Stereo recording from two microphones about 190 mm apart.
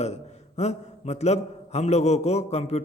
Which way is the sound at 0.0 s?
35° left (ahead or behind).